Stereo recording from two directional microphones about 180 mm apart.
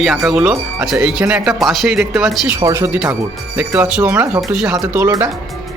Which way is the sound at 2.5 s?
15° right (ahead or behind).